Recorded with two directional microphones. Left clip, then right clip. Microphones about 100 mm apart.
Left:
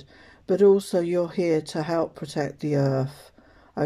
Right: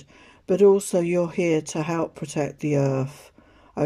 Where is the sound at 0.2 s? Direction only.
20° right (ahead or behind).